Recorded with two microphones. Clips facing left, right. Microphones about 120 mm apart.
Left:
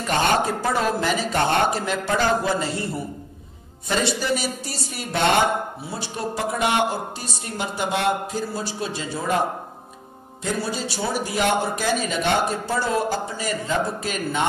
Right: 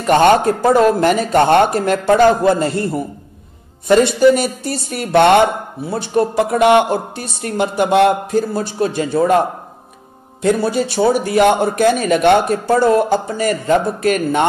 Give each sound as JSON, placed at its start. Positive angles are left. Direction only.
{"t": 0.0, "sound": "speech", "side_deg": -60}
{"t": 10.4, "sound": "speech", "side_deg": -60}